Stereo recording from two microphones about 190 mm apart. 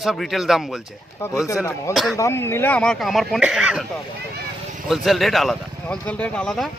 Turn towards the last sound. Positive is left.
turn(degrees=0)  # may be behind; listen again after turning